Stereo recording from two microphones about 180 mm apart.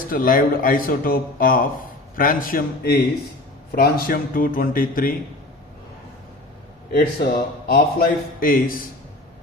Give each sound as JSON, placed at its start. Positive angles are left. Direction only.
{"t": 0.1, "sound": "speech", "side_deg": 50}
{"t": 6.9, "sound": "speech", "side_deg": 55}